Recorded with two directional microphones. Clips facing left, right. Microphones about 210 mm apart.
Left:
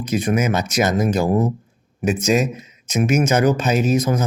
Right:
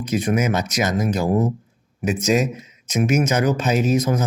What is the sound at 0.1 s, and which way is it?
Speech, 50° left (ahead or behind).